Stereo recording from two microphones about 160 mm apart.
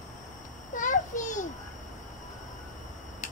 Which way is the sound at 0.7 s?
55° left (ahead or behind).